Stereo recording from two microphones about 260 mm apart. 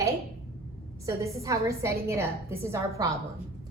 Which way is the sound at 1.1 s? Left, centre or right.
Centre.